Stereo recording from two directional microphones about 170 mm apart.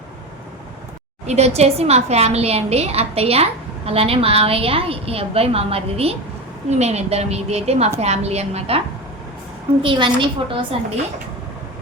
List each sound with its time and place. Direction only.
1.3 s a woman's voice: 40° right (ahead or behind)
9.8 s a woman's voice: 30° right (ahead or behind)